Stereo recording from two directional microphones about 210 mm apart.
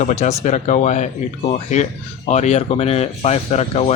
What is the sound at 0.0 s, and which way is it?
Speech, 30° left (ahead or behind).